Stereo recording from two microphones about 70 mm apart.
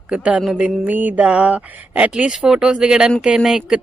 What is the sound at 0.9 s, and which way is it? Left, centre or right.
Speech, right.